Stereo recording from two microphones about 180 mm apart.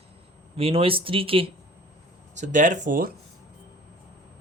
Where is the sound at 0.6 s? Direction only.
30° right (ahead or behind).